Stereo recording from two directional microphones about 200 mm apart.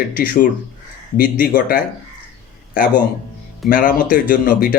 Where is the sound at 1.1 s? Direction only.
45° left (ahead or behind).